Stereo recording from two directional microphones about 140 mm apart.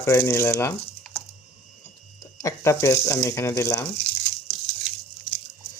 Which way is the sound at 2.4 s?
20° left (ahead or behind).